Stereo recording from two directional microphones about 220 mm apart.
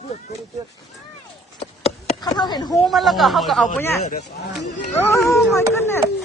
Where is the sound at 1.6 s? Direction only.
25° left (ahead or behind).